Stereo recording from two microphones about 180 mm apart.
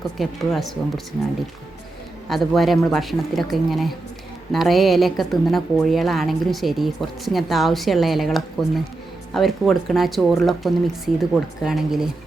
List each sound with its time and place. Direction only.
0.2 s a woman's voice: centre (ahead or behind)
2.3 s a woman's voice: centre (ahead or behind)